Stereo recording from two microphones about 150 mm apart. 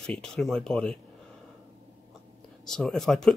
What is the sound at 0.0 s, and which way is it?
Speech, 5° left (ahead or behind).